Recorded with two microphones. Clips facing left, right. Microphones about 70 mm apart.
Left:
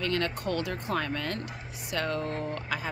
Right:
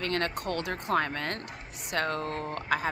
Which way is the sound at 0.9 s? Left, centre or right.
Right.